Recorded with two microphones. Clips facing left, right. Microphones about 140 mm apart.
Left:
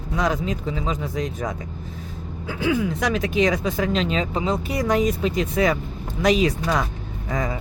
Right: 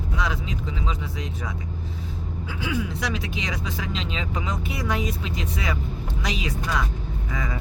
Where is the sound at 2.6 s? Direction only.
50° left (ahead or behind).